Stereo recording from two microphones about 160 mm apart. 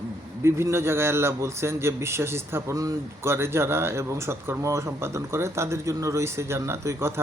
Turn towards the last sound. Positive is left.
turn(degrees=-15)  # may be behind; listen again after turning